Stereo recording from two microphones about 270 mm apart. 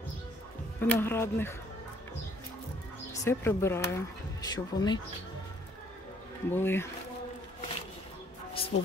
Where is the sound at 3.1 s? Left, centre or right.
Centre.